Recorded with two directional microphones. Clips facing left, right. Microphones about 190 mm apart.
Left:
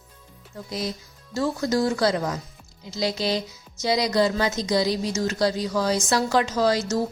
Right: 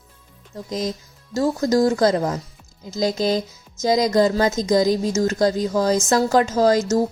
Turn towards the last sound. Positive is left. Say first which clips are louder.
# right 5 dB
turn(degrees=-45)  # may be behind; listen again after turning